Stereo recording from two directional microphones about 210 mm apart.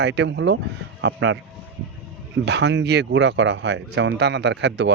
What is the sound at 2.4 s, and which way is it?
Speech, 55° right (ahead or behind).